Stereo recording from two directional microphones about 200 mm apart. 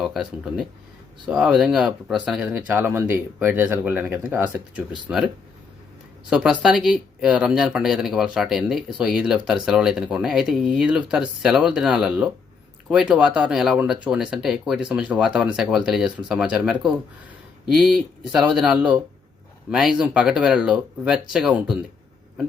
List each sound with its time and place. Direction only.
0.0 s speech: centre (ahead or behind)
6.3 s speech: 5° right (ahead or behind)